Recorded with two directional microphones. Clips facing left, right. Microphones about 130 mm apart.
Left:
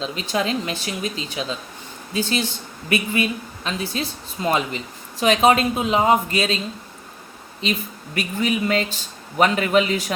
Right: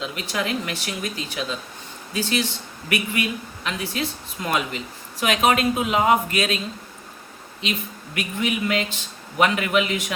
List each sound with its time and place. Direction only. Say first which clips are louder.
0.0 s speech: left 3 dB; 25° left (ahead or behind)
8.1 s speech: left 3 dB; 35° left (ahead or behind)